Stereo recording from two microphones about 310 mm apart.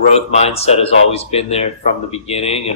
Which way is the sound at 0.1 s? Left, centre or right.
Centre.